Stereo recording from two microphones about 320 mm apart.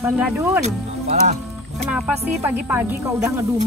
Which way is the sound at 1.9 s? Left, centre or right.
Centre.